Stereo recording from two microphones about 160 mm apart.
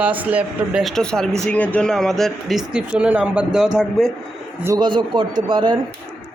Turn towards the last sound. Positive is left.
turn(degrees=-30)  # may be behind; listen again after turning